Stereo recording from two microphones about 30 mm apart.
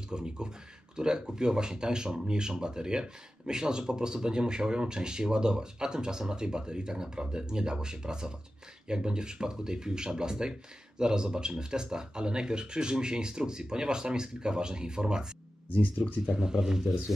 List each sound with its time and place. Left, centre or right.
0.1 s speech: right
16.3 s speech: right